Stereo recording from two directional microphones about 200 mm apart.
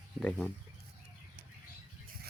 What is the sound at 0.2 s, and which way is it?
Speech, centre (ahead or behind).